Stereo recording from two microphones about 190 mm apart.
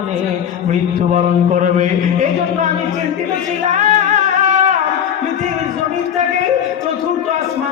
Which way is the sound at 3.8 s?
40° right (ahead or behind).